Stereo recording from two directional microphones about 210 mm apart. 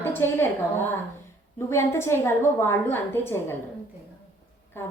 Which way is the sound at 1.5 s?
10° left (ahead or behind).